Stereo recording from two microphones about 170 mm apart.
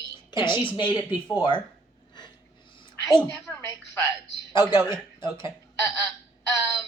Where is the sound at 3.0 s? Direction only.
15° left (ahead or behind).